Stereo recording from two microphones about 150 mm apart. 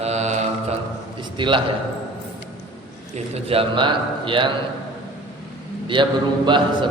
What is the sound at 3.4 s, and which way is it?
A man's voice, 35° right (ahead or behind).